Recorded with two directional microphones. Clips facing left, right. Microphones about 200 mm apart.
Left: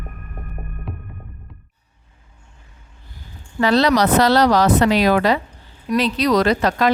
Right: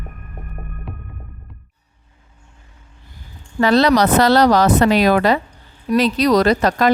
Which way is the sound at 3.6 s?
50° right (ahead or behind).